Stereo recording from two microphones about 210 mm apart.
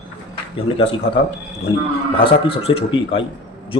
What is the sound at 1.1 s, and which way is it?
Speech, 60° left (ahead or behind).